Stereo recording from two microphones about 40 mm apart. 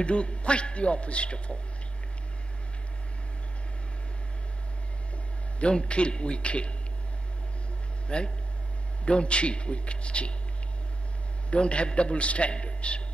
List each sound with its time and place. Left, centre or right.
0.0 s a man's voice: left
5.6 s a man's voice: left
8.1 s a man's voice: left
11.5 s a man's voice: left